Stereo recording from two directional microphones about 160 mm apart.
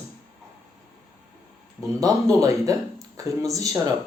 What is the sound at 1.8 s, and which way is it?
Speech, 20° right (ahead or behind).